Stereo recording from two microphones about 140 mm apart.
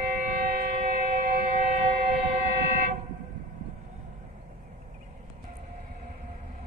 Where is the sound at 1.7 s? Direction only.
55° right (ahead or behind).